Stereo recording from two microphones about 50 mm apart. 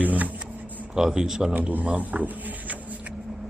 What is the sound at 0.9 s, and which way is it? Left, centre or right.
Speech, centre.